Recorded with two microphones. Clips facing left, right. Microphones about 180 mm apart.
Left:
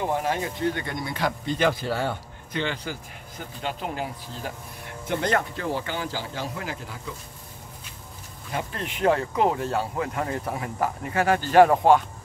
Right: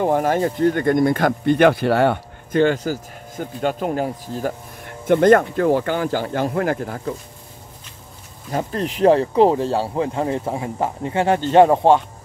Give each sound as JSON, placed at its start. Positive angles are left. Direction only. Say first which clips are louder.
{"t": 0.0, "sound": "speech", "louder": "right 8 dB", "side_deg": -50}
{"t": 2.5, "sound": "speech", "louder": "right 12 dB", "side_deg": -45}
{"t": 8.5, "sound": "speech", "louder": "right 8 dB", "side_deg": -40}